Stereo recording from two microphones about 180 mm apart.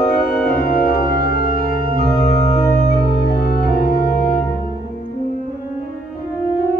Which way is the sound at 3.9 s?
55° left (ahead or behind).